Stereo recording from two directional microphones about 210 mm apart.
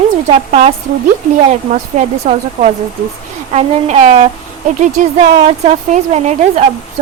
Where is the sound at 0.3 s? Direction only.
30° right (ahead or behind).